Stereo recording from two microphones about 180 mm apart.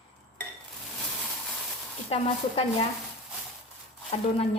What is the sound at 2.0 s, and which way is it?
Speech, 30° left (ahead or behind).